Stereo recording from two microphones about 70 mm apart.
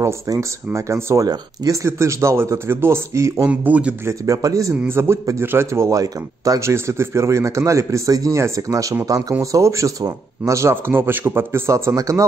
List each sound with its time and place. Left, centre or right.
0.3 s speech: right
1.2 s speech: right
1.9 s speech: right
3.4 s a man's voice: right
4.3 s speech: right
4.8 s speech: right
5.9 s speech: right
6.7 s speech: right
10.9 s speech: right
11.9 s speech: right